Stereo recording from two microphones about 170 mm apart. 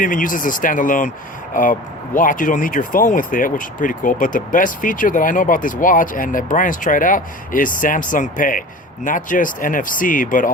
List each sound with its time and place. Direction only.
0.0 s speech: 50° left (ahead or behind)